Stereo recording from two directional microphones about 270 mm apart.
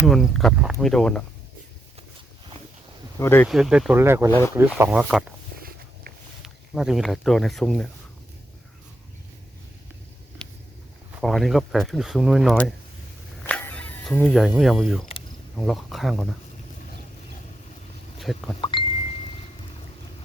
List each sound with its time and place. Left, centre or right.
0.0 s speech: centre
3.2 s speech: centre
4.3 s speech: centre
4.5 s speech: centre
5.5 s walk: right
6.4 s speech: centre
11.1 s speech: centre
13.4 s a sound: centre
15.5 s speech: centre
18.2 s speech: centre
18.6 s a sound: centre